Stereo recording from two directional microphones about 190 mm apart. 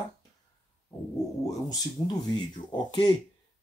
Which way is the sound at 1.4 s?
20° left (ahead or behind).